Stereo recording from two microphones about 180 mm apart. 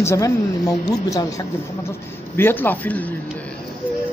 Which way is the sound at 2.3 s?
10° left (ahead or behind).